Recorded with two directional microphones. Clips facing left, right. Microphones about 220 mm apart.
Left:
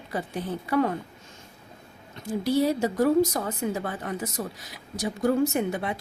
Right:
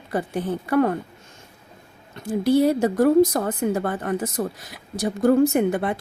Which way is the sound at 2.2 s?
55° right (ahead or behind).